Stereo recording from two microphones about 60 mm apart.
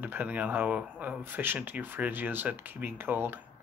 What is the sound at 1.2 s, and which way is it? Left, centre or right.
Speech, right.